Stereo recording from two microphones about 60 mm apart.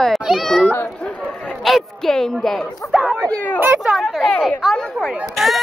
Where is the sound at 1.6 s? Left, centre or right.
Centre.